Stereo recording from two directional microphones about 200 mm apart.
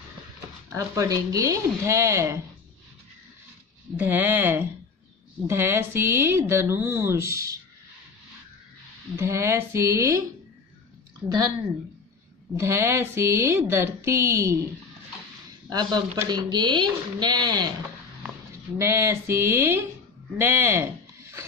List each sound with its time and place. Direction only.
0.7 s a woman's voice: 15° right (ahead or behind)
3.9 s a woman's voice: 10° right (ahead or behind)
9.1 s a woman's voice: 15° right (ahead or behind)
12.5 s a woman's voice: 15° right (ahead or behind)
15.7 s speech: 20° right (ahead or behind)
18.8 s a woman's voice: 15° right (ahead or behind)